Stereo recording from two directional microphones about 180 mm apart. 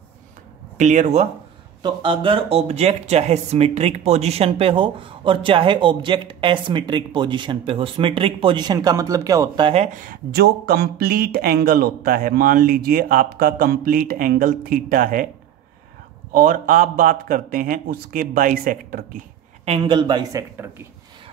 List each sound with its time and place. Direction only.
0.7 s speech: 40° right (ahead or behind)
1.8 s speech: 25° right (ahead or behind)
9.7 s speech: 35° right (ahead or behind)
9.9 s speech: 55° right (ahead or behind)
16.3 s speech: 50° right (ahead or behind)
19.6 s speech: 30° right (ahead or behind)
20.5 s speech: 10° right (ahead or behind)